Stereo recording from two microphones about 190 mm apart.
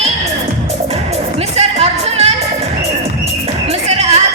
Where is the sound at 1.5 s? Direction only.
35° right (ahead or behind).